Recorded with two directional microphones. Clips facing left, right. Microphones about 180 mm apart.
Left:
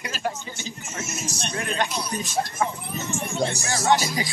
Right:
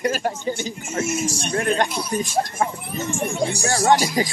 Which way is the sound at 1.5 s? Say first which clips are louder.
Right 6 dB; 50° right (ahead or behind).